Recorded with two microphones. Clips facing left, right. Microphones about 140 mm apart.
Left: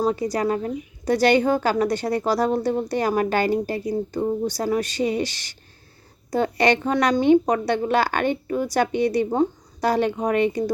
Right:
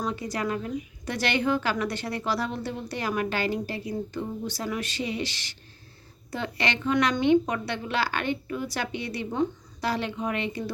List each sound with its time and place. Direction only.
0.0 s a woman's voice: 40° left (ahead or behind)